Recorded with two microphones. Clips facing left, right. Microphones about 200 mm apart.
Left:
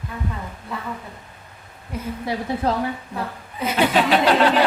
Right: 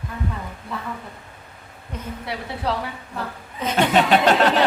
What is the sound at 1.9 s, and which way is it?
Speech, 10° left (ahead or behind).